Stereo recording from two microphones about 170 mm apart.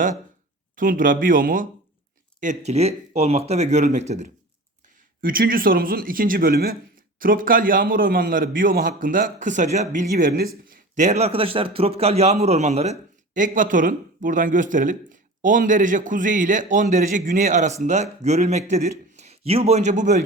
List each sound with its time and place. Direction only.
0.8 s a man's voice: 50° right (ahead or behind)
5.2 s a man's voice: 55° right (ahead or behind)